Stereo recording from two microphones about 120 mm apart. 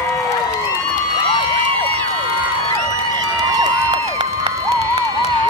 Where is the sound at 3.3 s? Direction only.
35° right (ahead or behind).